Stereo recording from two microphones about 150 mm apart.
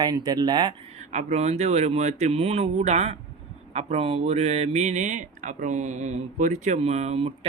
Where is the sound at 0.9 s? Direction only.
50° right (ahead or behind).